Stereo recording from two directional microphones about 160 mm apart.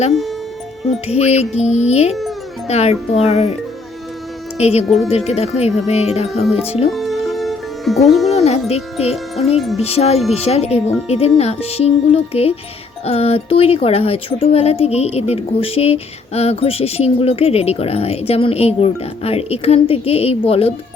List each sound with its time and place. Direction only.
0.1 s speech: centre (ahead or behind)
1.0 s a child's voice: 40° left (ahead or behind)
4.5 s speech: 40° left (ahead or behind)
4.9 s speech: centre (ahead or behind)
5.1 s speech: 40° left (ahead or behind)
6.9 s music: centre (ahead or behind)
8.7 s speech: 40° left (ahead or behind)
9.1 s speech: centre (ahead or behind)
9.7 s speech: 40° left (ahead or behind)